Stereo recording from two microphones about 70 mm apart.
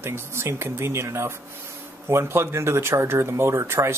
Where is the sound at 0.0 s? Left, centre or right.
Right.